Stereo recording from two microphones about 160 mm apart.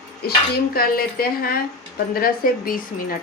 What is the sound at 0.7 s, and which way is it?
A woman's voice, 65° left (ahead or behind).